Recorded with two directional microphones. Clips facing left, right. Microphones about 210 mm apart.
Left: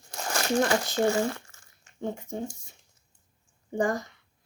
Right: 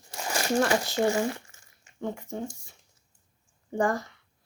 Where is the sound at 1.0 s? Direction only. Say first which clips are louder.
Left 1 dB; 15° right (ahead or behind).